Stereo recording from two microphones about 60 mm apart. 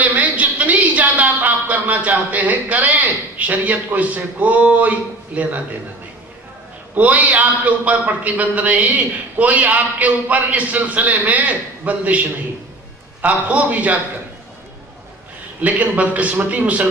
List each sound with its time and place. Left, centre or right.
0.0 s a sound: right
7.0 s a man's voice: right
15.6 s a man's voice: right